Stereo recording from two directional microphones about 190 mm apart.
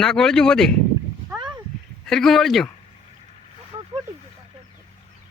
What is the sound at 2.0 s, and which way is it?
Speech, centre (ahead or behind).